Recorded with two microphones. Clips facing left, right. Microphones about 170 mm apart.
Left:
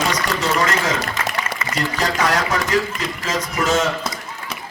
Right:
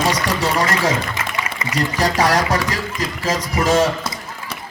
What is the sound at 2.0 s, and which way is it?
Speech, 35° right (ahead or behind).